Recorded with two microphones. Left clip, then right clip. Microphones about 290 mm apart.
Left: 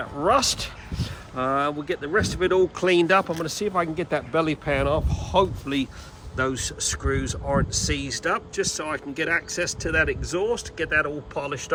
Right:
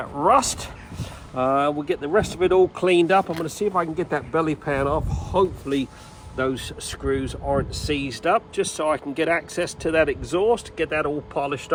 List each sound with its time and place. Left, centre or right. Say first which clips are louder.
0.0 s speech: right 3 dB; centre